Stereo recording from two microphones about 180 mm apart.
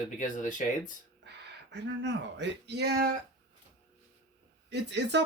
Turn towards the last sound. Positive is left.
turn(degrees=-75)  # may be behind; listen again after turning